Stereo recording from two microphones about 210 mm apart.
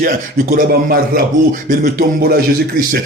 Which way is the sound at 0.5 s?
45° right (ahead or behind).